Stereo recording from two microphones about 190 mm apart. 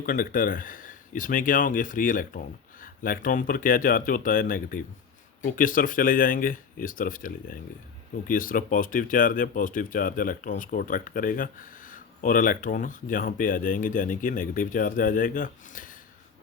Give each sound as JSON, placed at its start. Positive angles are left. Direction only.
{"t": 0.0, "sound": "speech", "side_deg": 45}